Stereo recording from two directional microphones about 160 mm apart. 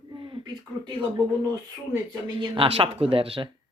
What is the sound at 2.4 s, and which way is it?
Speech, 35° right (ahead or behind).